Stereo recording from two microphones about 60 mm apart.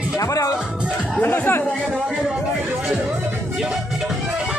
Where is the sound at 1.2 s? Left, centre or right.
Left.